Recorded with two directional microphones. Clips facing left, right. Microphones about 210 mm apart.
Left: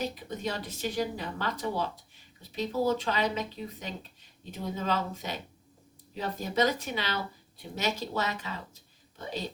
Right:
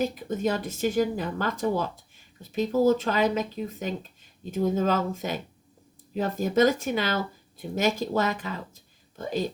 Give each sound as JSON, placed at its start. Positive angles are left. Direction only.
{"t": 0.0, "sound": "speech", "side_deg": -50}